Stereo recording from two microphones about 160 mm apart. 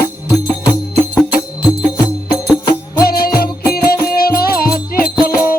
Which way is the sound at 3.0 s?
70° left (ahead or behind).